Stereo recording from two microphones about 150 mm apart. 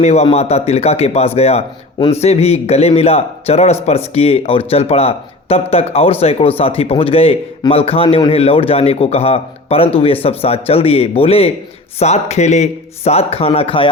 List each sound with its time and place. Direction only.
0.0 s speech: 45° left (ahead or behind)